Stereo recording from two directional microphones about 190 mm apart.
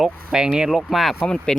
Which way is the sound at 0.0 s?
5° right (ahead or behind).